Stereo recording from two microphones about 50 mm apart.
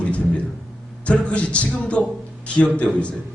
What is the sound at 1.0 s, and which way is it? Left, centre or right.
A man's voice, left.